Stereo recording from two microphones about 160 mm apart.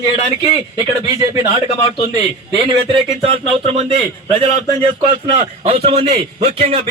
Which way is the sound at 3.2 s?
40° right (ahead or behind).